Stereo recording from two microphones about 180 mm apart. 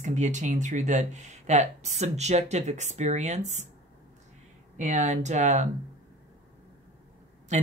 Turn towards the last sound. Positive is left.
turn(degrees=-40)  # may be behind; listen again after turning